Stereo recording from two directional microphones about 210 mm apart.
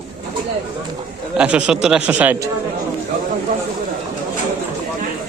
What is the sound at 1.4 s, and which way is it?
Speech, 5° right (ahead or behind).